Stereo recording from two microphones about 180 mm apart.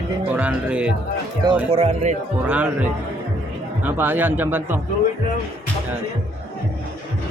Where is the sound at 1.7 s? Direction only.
40° right (ahead or behind).